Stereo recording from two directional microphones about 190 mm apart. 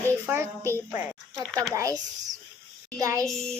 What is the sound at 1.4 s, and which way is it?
Speech, 5° left (ahead or behind).